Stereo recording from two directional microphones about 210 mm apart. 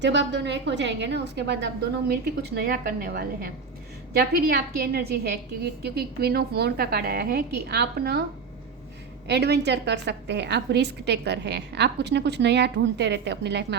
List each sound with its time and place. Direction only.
0.0 s a woman's voice: 55° right (ahead or behind)
9.2 s a woman's voice: 55° right (ahead or behind)